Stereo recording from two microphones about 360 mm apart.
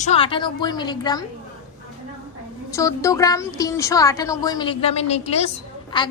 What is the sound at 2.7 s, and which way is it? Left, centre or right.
A woman's voice, centre.